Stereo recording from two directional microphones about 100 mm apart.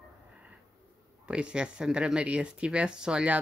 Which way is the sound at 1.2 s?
10° right (ahead or behind).